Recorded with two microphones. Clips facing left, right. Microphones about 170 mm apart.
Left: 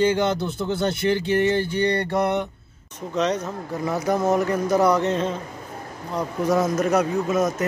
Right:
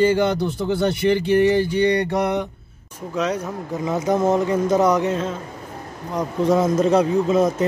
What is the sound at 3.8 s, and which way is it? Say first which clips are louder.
Speech: right 3 dB; 20° right (ahead or behind).